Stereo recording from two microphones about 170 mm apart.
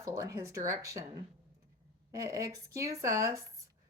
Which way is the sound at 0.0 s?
20° right (ahead or behind).